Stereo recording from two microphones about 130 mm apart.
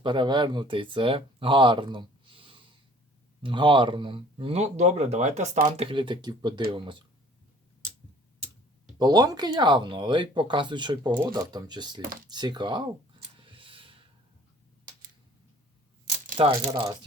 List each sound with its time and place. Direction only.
0.0 s speech: 35° right (ahead or behind); by 5.9 s 55° right (ahead or behind)
5.9 s speech: 40° right (ahead or behind)
9.0 s speech: 30° right (ahead or behind)
13.5 s a sound: 40° right (ahead or behind)
16.4 s speech: 45° right (ahead or behind)